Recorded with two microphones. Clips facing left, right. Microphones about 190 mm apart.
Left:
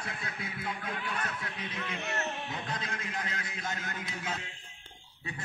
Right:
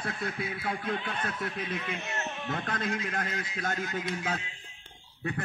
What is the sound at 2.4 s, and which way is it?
Speech, 55° right (ahead or behind).